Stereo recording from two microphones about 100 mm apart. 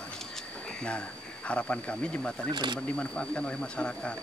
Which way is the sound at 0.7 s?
10° left (ahead or behind).